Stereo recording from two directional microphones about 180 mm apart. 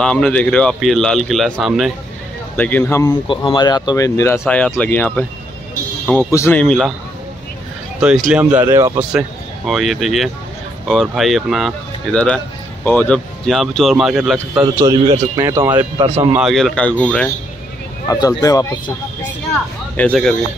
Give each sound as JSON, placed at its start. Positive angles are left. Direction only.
{"t": 0.0, "sound": "a man's voice", "side_deg": 5}
{"t": 2.5, "sound": "speech", "side_deg": 10}
{"t": 3.3, "sound": "speech", "side_deg": 25}
{"t": 8.3, "sound": "speech", "side_deg": -5}
{"t": 9.7, "sound": "a man's voice", "side_deg": 0}
{"t": 14.9, "sound": "speech", "side_deg": -20}
{"t": 16.3, "sound": "a man's voice", "side_deg": 0}
{"t": 18.0, "sound": "speech", "side_deg": 20}
{"t": 20.0, "sound": "a man's voice", "side_deg": 5}